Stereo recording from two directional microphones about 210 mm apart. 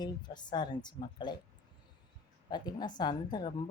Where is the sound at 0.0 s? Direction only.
20° left (ahead or behind).